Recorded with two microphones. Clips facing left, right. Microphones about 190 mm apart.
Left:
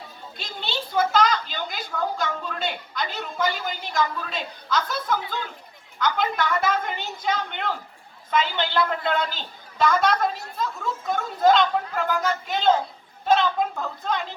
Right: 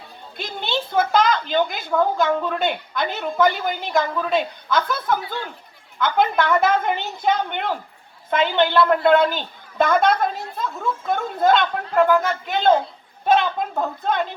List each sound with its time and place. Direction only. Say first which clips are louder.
0.3 s a woman's voice: right 6 dB; 55° right (ahead or behind)